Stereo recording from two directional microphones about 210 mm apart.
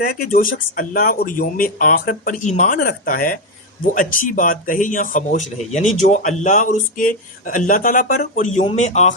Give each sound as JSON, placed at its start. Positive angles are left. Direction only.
{"t": 0.0, "sound": "speech", "side_deg": 40}